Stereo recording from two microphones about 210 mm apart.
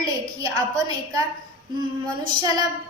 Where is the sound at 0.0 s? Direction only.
15° right (ahead or behind).